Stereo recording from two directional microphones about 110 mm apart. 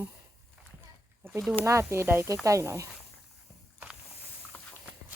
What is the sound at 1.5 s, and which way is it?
Speech, 25° right (ahead or behind).